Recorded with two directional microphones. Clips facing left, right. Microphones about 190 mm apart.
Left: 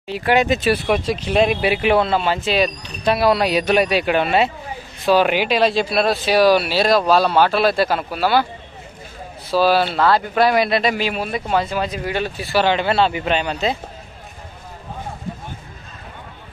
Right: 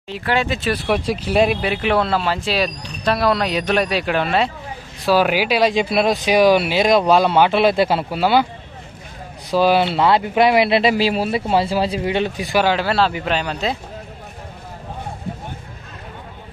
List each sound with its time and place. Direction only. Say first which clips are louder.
0.1 s speech: left 4 dB; 15° left (ahead or behind)
0.8 s speech: even; 5° right (ahead or behind)
1.6 s speech: left 2 dB; 5° left (ahead or behind); by 8.5 s 20° right (ahead or behind)
9.5 s speech: right 1 dB; 20° right (ahead or behind)
12.7 s speech: left 1 dB; centre (ahead or behind)